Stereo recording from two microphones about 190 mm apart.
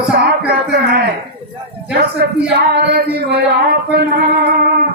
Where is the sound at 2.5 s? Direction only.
60° right (ahead or behind).